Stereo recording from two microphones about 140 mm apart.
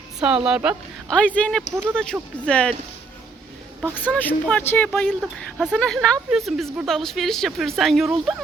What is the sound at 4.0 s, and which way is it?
Speech, 10° left (ahead or behind).